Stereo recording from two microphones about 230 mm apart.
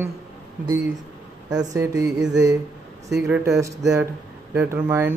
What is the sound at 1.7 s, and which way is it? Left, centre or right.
Speech, centre.